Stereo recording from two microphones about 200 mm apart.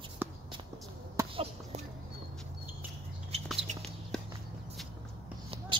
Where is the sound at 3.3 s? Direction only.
30° right (ahead or behind).